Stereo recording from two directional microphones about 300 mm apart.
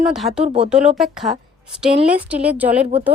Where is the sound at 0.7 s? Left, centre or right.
Centre.